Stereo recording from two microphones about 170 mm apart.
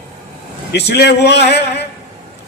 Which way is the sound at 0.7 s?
75° left (ahead or behind).